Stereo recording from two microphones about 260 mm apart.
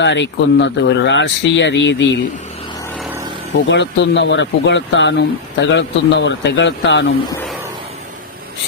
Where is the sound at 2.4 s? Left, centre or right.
Left; by 3.1 s centre.